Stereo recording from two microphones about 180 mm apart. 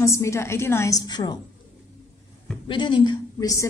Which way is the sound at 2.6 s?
25° left (ahead or behind).